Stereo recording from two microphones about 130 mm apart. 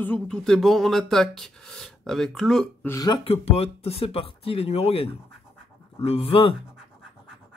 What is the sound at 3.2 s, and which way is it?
Speech, 50° left (ahead or behind).